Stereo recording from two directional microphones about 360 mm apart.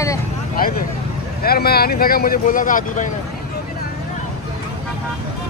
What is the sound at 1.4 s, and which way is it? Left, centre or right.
Speech, left.